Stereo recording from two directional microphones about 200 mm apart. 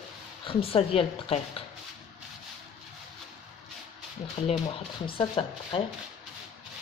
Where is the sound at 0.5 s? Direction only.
30° left (ahead or behind).